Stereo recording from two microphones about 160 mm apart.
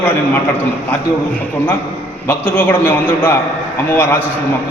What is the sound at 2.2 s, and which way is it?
A man's voice, 10° left (ahead or behind).